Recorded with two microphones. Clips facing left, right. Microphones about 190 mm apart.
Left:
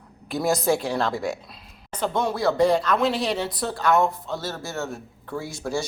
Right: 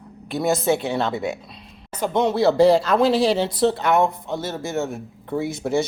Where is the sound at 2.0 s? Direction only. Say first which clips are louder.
Right 5 dB; 20° right (ahead or behind).